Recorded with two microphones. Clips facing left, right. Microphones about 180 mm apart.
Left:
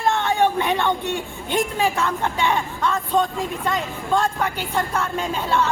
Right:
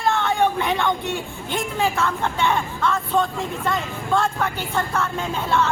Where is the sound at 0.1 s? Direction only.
15° left (ahead or behind).